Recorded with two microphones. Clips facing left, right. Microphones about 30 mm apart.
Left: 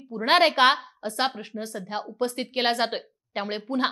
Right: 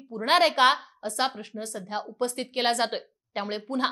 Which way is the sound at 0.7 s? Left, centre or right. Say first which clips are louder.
Left 1 dB; centre.